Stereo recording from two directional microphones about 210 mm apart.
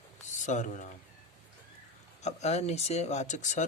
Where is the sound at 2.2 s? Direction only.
30° left (ahead or behind).